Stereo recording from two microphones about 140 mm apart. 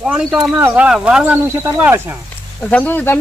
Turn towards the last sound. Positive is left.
turn(degrees=10)  # may be behind; listen again after turning